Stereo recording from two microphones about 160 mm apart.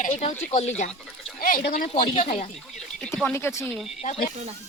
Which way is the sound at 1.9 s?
45° left (ahead or behind).